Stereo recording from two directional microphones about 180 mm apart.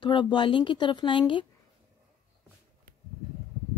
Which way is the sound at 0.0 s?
25° left (ahead or behind).